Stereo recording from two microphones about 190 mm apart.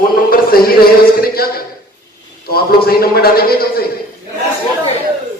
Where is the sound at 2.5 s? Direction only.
50° left (ahead or behind).